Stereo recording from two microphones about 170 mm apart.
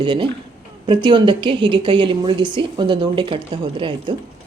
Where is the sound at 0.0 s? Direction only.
30° right (ahead or behind).